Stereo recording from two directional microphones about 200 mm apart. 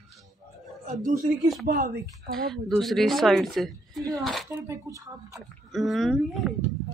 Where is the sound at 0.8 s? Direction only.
40° right (ahead or behind).